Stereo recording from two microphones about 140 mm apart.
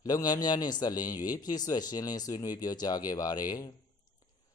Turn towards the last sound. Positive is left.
turn(degrees=30)  # may be behind; listen again after turning